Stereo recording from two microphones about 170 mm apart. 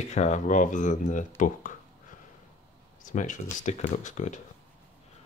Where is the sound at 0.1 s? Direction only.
45° left (ahead or behind).